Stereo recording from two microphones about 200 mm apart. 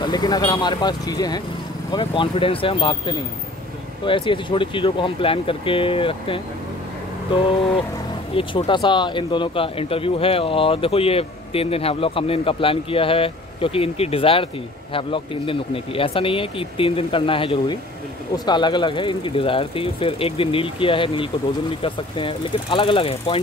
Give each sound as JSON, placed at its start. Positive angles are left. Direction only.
{"t": 0.0, "sound": "speech", "side_deg": 20}
{"t": 8.4, "sound": "speech", "side_deg": 25}